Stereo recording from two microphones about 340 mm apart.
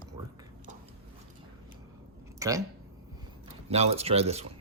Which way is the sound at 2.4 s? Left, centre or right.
Centre.